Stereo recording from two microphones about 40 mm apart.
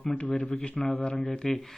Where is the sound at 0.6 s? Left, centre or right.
Left.